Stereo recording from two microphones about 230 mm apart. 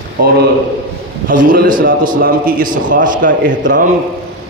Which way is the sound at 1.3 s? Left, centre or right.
Right.